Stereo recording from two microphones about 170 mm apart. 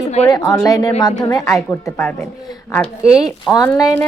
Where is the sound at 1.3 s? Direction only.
15° left (ahead or behind).